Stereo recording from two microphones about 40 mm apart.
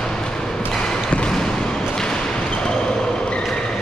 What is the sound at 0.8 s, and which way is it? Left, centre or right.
Basketball bounce, left.